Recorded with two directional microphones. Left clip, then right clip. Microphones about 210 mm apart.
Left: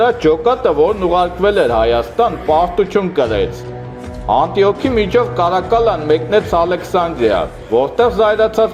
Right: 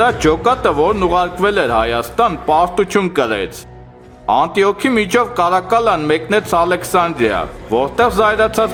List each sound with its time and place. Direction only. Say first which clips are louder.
0.0 s speech: left 1 dB; 20° right (ahead or behind)